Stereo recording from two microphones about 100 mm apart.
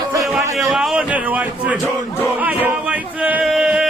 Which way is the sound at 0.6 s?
Centre (ahead or behind).